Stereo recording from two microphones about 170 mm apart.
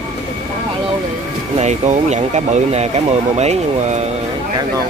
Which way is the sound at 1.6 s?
40° right (ahead or behind).